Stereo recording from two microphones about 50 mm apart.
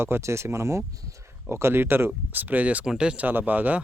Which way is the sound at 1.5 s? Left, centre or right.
Right.